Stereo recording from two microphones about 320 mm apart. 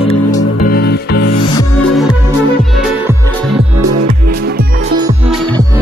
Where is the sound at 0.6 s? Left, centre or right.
Left.